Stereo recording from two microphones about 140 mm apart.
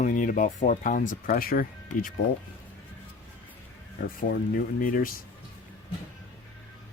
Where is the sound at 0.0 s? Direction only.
70° left (ahead or behind); by 2.1 s 90° left.